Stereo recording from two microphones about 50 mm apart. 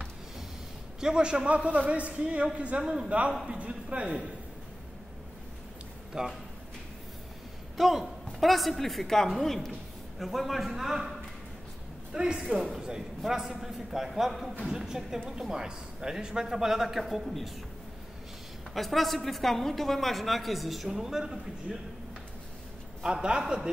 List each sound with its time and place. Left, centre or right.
1.0 s a man's voice: centre
2.8 s a man's voice: centre
3.1 s a man's voice: right
6.1 s a man's voice: centre
7.7 s a woman's voice: centre
12.5 s a woman's voice: centre
18.7 s a woman's voice: centre
23.0 s a man's voice: centre